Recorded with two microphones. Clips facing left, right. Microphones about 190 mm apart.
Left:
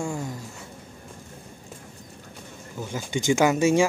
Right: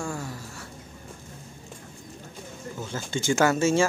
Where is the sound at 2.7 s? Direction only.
15° left (ahead or behind).